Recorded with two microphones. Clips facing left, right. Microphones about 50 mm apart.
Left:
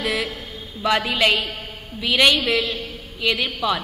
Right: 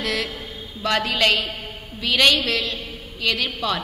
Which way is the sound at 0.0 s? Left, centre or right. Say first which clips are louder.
Left 1 dB; centre.